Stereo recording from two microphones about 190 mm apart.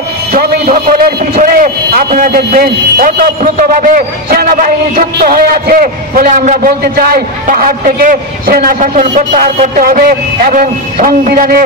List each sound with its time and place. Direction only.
0.4 s a man's voice: 50° right (ahead or behind)